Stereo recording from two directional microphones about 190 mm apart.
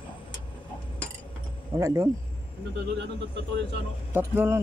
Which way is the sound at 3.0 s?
65° right (ahead or behind).